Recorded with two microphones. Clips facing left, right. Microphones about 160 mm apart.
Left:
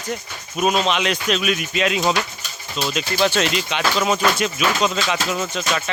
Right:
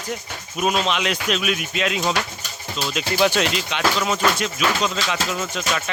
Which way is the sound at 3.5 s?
Centre (ahead or behind).